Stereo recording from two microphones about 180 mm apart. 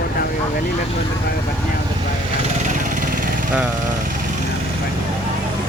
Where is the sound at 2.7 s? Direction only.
50° right (ahead or behind).